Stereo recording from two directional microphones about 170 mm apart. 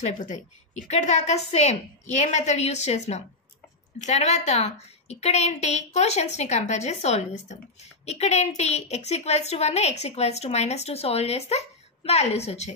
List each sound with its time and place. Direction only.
0.0 s a woman's voice: 45° left (ahead or behind)